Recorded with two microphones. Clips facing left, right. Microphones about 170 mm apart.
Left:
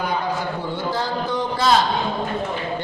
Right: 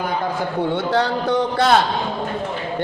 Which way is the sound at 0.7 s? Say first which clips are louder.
Right 6 dB; 70° right (ahead or behind).